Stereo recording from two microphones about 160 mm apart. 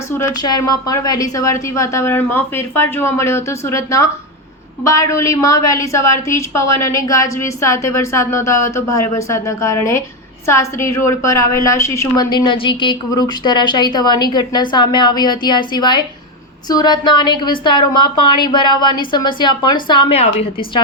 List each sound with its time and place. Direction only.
0.2 s a woman's voice: 25° left (ahead or behind)
20.1 s a woman's voice: 40° left (ahead or behind)